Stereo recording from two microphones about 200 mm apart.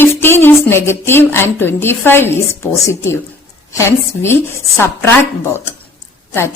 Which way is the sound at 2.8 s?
15° left (ahead or behind).